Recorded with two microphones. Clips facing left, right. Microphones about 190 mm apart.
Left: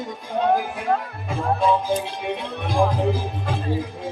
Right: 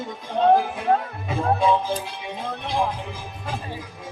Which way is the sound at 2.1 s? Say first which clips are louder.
Left 4 dB; 65° left (ahead or behind).